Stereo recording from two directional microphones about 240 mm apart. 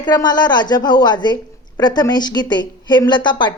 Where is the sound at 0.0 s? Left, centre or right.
Centre.